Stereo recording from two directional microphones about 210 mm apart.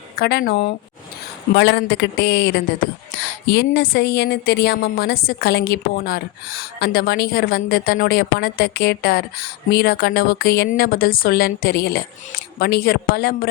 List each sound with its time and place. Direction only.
0.2 s a woman's voice: 50° left (ahead or behind)